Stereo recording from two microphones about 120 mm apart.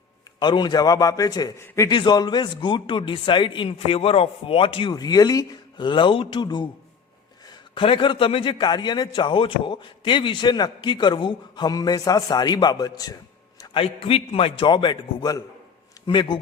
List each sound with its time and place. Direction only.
0.3 s a man's voice: 35° left (ahead or behind)
1.5 s a man's voice: 25° left (ahead or behind)
1.9 s a man's voice: 40° left (ahead or behind)
7.8 s a man's voice: 45° left (ahead or behind)
13.7 s a man's voice: 55° left (ahead or behind)